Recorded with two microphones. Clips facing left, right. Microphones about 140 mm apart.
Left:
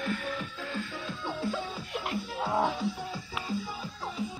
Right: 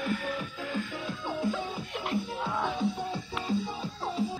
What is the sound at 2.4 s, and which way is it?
Music, 35° left (ahead or behind).